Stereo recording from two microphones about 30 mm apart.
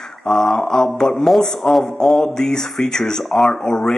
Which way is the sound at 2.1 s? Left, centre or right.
Left.